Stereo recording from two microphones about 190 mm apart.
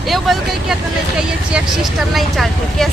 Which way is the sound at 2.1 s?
Centre (ahead or behind).